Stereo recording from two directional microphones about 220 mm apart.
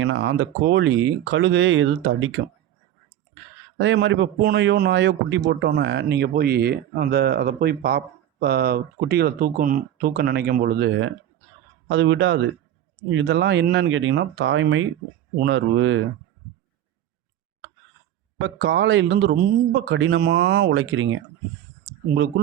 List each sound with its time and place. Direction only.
0.0 s speech: 55° right (ahead or behind)
3.8 s speech: 55° right (ahead or behind)
18.3 s speech: 55° right (ahead or behind)